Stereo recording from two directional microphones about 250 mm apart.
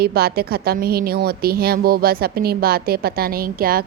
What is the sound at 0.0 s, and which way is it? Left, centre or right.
A woman's voice, right.